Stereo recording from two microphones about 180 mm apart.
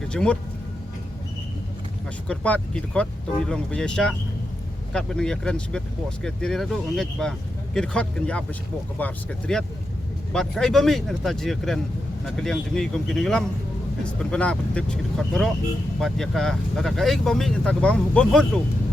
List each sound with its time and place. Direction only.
0.1 s speech: 5° left (ahead or behind)
2.2 s speech: 5° left (ahead or behind)